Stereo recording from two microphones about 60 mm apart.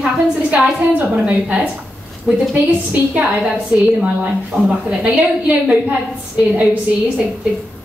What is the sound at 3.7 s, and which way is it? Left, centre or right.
A woman's voice, right.